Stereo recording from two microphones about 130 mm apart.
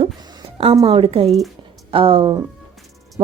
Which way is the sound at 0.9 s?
45° right (ahead or behind).